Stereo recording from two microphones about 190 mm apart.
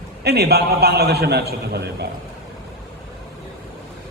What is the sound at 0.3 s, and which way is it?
A man's voice, 55° right (ahead or behind).